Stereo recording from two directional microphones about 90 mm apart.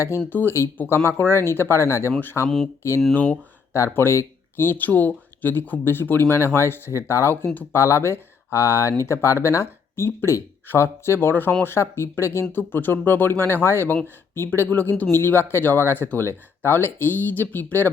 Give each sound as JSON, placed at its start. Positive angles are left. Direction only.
{"t": 0.3, "sound": "speech", "side_deg": 25}
{"t": 3.9, "sound": "speech", "side_deg": 30}